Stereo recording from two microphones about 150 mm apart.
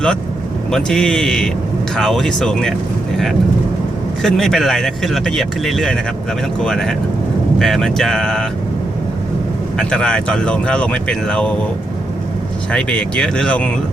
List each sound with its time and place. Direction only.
0.7 s speech: 5° left (ahead or behind)
4.2 s speech: 5° left (ahead or behind)
9.7 s speech: 5° left (ahead or behind)
12.7 s speech: 5° left (ahead or behind)